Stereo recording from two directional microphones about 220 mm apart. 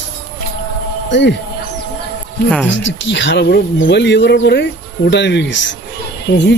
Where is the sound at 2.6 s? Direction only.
55° left (ahead or behind).